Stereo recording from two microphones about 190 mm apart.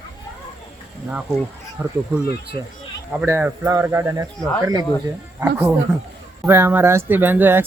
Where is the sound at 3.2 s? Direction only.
10° right (ahead or behind).